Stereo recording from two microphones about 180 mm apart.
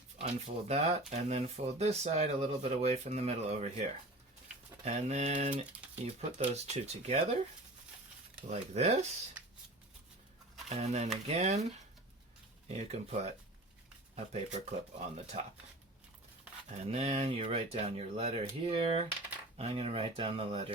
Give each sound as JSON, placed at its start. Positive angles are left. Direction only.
{"t": 0.2, "sound": "speech", "side_deg": -35}
{"t": 4.9, "sound": "speech", "side_deg": -40}
{"t": 8.4, "sound": "speech", "side_deg": -40}
{"t": 10.7, "sound": "speech", "side_deg": -40}
{"t": 12.6, "sound": "speech", "side_deg": -35}
{"t": 14.3, "sound": "speech", "side_deg": -35}
{"t": 16.9, "sound": "speech", "side_deg": -35}